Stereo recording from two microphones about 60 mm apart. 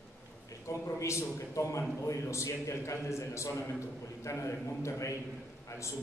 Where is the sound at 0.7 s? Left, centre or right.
Left.